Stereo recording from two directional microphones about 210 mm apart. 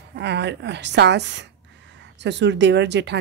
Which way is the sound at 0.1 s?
55° right (ahead or behind).